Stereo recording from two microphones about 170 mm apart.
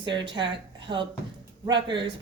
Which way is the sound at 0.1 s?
30° right (ahead or behind).